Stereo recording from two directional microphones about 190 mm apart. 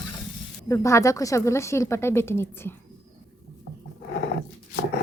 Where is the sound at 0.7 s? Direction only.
15° left (ahead or behind).